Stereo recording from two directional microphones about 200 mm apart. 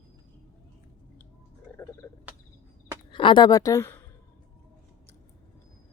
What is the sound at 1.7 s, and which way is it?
Frog, 5° left (ahead or behind).